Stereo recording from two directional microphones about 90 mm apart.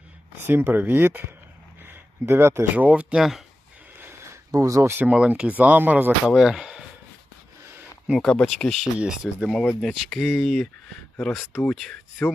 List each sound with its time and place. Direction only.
0.4 s speech: 20° right (ahead or behind)
1.9 s a sound: 30° right (ahead or behind)
2.7 s speech: 15° right (ahead or behind)
3.9 s a sound: 25° right (ahead or behind)
4.5 s speech: 35° right (ahead or behind)
5.1 s speech: 10° right (ahead or behind)
6.2 s speech: 5° right (ahead or behind)
8.2 s speech: 5° left (ahead or behind)
9.0 s speech: 5° right (ahead or behind)
11.7 s speech: centre (ahead or behind)